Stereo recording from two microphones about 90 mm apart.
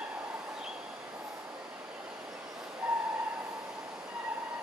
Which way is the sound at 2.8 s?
10° right (ahead or behind).